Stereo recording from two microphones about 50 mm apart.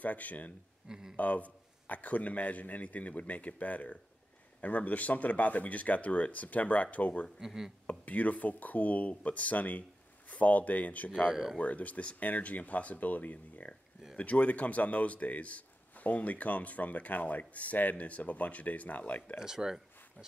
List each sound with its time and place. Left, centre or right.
0.0 s a man's voice: left
0.8 s speech: centre
1.1 s a man's voice: left
7.3 s speech: centre
7.8 s a man's voice: left
11.2 s speech: centre
11.5 s a man's voice: left
19.4 s speech: centre